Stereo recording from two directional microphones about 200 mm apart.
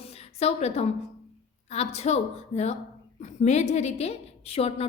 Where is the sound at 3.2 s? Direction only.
35° left (ahead or behind).